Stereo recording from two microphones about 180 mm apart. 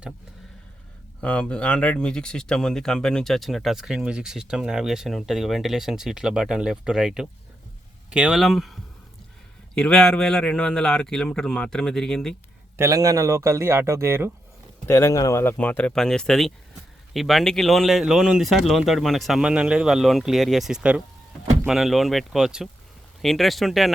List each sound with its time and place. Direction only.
1.2 s speech: 5° left (ahead or behind)
12.7 s speech: 15° right (ahead or behind)
14.8 s speech: 15° left (ahead or behind)